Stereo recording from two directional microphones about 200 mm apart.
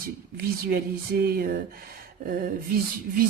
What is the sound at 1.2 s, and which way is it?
Speech, 50° right (ahead or behind).